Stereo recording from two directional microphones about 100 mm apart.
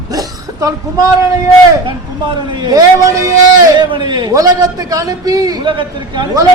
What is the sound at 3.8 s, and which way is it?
Speech, 50° right (ahead or behind).